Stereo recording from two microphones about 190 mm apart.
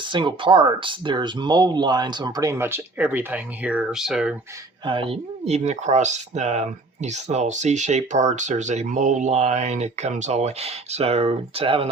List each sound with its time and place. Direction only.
0.0 s speech: 25° right (ahead or behind); by 4.4 s 5° right (ahead or behind)
4.9 s speech: 30° right (ahead or behind)